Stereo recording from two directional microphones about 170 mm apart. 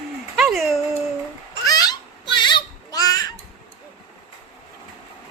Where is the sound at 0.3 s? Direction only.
Centre (ahead or behind).